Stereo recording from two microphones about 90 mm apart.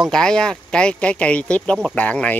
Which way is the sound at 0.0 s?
5° left (ahead or behind).